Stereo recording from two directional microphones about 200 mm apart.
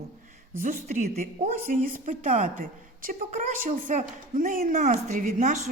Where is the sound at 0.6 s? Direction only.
40° right (ahead or behind).